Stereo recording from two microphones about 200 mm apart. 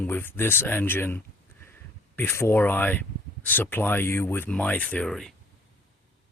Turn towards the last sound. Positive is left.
turn(degrees=0)  # may be behind; listen again after turning